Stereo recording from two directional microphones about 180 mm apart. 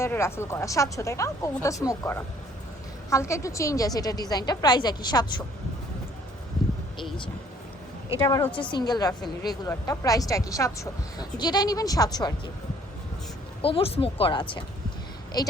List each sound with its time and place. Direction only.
0.0 s speech: 15° left (ahead or behind)
8.2 s speech: 15° left (ahead or behind)
13.6 s speech: 30° left (ahead or behind)